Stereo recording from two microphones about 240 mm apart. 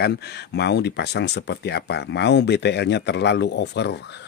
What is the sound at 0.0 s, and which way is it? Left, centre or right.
Speech, left.